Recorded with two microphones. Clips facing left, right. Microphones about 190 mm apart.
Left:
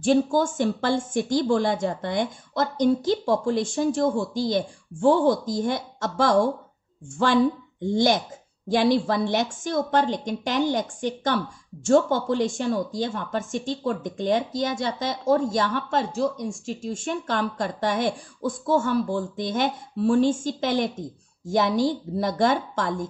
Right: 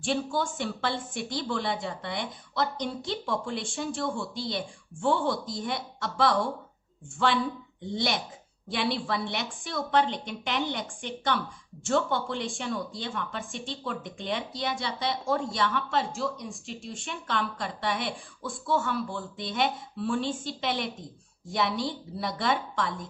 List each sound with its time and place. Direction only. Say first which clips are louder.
0.0 s a woman's voice: left 9 dB; 40° left (ahead or behind)
8.6 s a woman's voice: left 9 dB; 40° left (ahead or behind)